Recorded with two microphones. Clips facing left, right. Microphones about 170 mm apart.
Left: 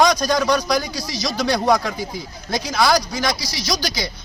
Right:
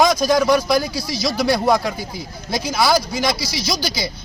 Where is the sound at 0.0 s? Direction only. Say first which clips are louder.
Right 2 dB; 5° right (ahead or behind).